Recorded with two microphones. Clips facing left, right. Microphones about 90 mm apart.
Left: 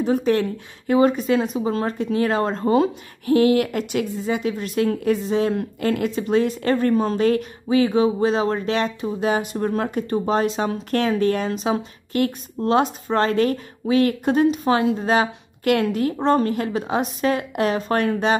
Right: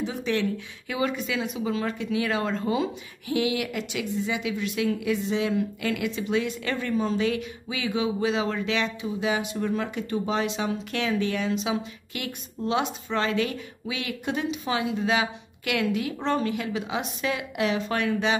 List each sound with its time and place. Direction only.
0.0 s speech: 45° left (ahead or behind)